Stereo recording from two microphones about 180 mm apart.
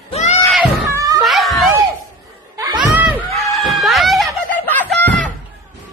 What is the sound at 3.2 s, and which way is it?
Snicker, centre (ahead or behind).